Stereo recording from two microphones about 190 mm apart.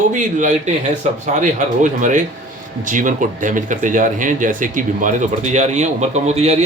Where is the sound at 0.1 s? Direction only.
40° right (ahead or behind).